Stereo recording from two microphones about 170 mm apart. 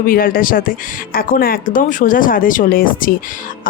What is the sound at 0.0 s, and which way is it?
Speech, 55° left (ahead or behind).